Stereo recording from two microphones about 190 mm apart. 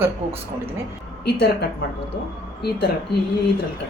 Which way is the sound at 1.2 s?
60° left (ahead or behind).